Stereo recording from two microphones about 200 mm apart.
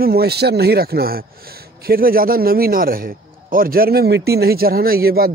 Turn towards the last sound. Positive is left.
turn(degrees=-50)  # may be behind; listen again after turning